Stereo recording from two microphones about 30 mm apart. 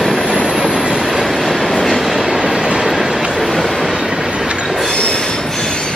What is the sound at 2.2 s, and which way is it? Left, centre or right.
Train, centre.